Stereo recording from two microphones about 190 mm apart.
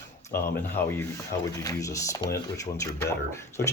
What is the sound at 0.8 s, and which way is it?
Speech, 10° left (ahead or behind).